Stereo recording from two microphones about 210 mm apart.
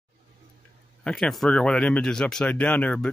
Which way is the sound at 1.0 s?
Centre (ahead or behind).